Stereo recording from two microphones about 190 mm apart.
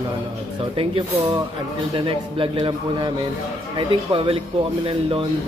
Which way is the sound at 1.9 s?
30° right (ahead or behind).